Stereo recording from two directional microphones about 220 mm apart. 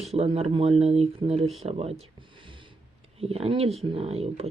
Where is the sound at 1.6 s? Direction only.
30° right (ahead or behind).